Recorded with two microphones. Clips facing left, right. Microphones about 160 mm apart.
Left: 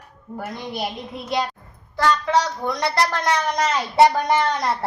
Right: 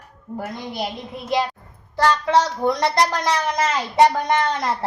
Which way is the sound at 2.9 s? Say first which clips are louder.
Right 1 dB; 10° right (ahead or behind).